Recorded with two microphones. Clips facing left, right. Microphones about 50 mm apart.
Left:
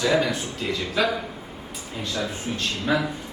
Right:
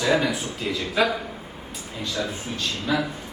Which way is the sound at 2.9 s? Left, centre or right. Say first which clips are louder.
Left 1 dB; left.